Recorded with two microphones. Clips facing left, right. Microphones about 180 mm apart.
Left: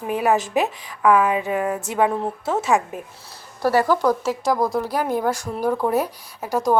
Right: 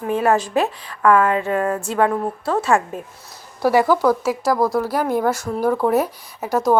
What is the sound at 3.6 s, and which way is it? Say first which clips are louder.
A woman's voice: right 2 dB; 10° right (ahead or behind).